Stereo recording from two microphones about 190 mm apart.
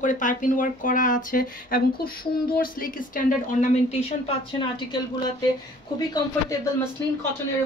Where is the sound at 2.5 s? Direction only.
50° left (ahead or behind).